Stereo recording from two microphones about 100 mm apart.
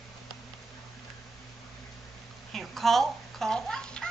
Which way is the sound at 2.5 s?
Centre (ahead or behind).